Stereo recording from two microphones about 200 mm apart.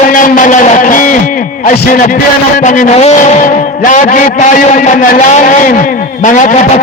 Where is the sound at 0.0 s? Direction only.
40° left (ahead or behind).